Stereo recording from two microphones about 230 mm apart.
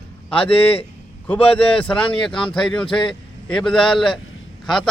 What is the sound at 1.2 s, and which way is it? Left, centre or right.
A man's voice, centre.